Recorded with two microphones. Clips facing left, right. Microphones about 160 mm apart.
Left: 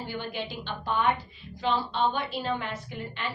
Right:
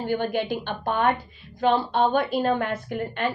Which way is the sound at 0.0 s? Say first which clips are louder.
Right 9 dB; 50° right (ahead or behind).